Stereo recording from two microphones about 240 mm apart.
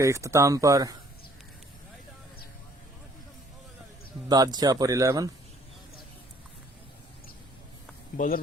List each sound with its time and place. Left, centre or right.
0.0 s speech: centre
4.3 s speech: centre
8.1 s speech: left